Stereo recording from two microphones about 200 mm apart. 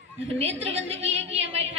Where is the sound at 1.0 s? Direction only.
30° right (ahead or behind).